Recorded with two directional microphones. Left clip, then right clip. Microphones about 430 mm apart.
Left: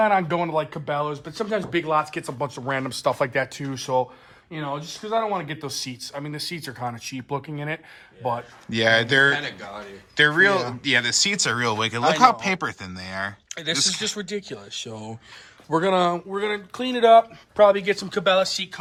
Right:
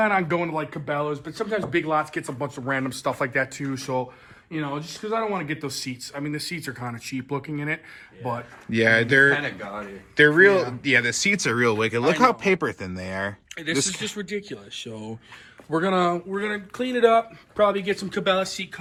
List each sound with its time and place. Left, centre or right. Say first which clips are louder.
0.0 s speech: left 2 dB; left
8.7 s speech: even; centre
13.5 s speech: left 2 dB; centre
13.7 s speech: left 3 dB; centre
14.0 s speech: left 2 dB; centre